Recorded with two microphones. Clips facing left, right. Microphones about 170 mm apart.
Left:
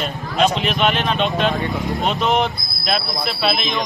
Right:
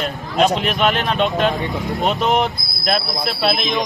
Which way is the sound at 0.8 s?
45° right (ahead or behind).